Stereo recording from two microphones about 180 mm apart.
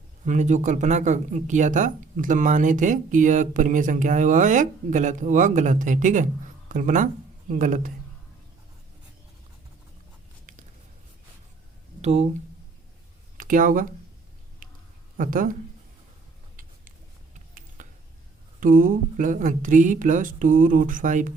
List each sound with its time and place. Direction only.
0.3 s speech: 45° right (ahead or behind)
12.0 s speech: 35° right (ahead or behind)
13.3 s speech: 50° right (ahead or behind)
15.2 s speech: 50° right (ahead or behind)
17.8 s finger snapping: 45° right (ahead or behind)
18.6 s speech: 50° right (ahead or behind)